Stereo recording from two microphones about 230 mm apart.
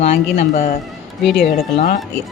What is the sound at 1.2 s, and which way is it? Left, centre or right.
Speech, centre.